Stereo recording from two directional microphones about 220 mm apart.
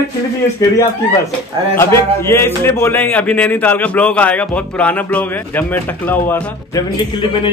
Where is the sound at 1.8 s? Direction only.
10° left (ahead or behind).